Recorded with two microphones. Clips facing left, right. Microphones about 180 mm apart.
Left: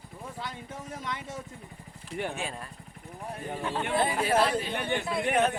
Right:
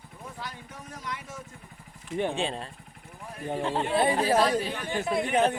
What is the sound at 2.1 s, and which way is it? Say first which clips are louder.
Speech: right 5 dB; 25° right (ahead or behind).